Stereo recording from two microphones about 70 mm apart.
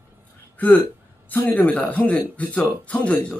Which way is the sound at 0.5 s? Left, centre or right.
Left.